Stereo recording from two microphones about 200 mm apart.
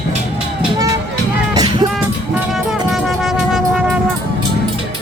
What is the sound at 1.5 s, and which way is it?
Music, 20° right (ahead or behind).